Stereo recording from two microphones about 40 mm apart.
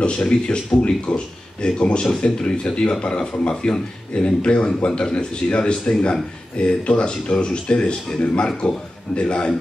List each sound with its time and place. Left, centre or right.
0.3 s speech: left